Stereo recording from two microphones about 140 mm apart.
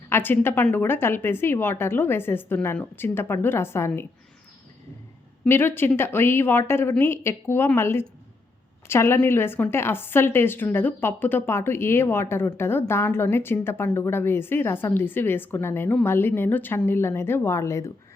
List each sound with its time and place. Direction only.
0.1 s a woman's voice: 15° left (ahead or behind)
5.5 s a woman's voice: 15° left (ahead or behind)